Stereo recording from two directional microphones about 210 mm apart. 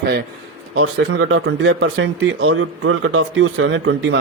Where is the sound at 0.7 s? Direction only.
65° right (ahead or behind).